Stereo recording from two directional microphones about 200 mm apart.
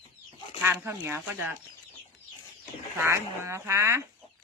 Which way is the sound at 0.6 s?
10° right (ahead or behind).